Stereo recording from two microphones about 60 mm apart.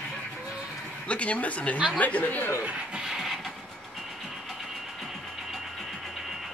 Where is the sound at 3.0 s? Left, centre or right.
Centre.